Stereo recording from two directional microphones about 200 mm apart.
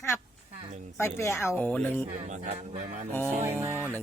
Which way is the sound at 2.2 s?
35° right (ahead or behind).